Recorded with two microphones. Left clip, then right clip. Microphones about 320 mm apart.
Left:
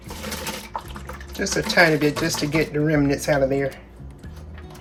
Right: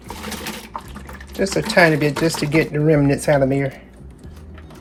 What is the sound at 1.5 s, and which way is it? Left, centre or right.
Speech, right.